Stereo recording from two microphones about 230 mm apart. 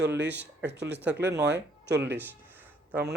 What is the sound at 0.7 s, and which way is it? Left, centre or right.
Speech, right.